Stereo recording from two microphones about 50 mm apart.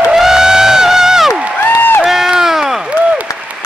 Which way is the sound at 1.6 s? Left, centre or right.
Left.